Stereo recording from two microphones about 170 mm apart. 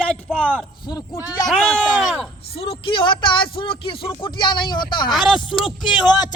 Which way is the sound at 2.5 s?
35° left (ahead or behind).